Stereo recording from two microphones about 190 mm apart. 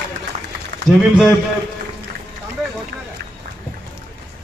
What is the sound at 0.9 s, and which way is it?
Speech, centre (ahead or behind).